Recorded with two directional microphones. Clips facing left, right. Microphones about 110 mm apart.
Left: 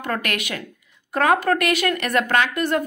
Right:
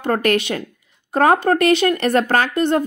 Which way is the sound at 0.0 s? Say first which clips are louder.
Right 8 dB; 35° right (ahead or behind).